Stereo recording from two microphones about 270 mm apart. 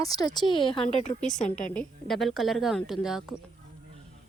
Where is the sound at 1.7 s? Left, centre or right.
Centre.